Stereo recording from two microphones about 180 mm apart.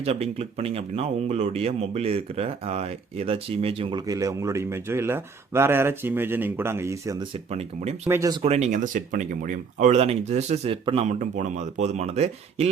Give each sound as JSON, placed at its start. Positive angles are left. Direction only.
{"t": 0.0, "sound": "speech", "side_deg": -35}
{"t": 4.0, "sound": "speech", "side_deg": -20}
{"t": 7.3, "sound": "speech", "side_deg": -35}
{"t": 8.0, "sound": "speech", "side_deg": -15}
{"t": 8.3, "sound": "speech", "side_deg": -30}